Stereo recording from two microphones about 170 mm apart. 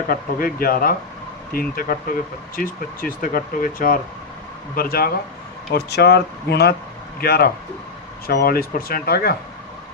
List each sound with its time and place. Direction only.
0.1 s speech: 55° left (ahead or behind)
5.7 s speech: 75° left (ahead or behind)